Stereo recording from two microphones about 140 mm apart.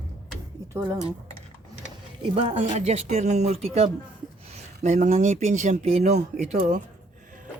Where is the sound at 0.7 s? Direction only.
20° right (ahead or behind).